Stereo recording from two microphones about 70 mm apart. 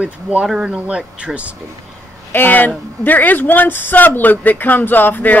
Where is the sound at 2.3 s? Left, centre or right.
Left.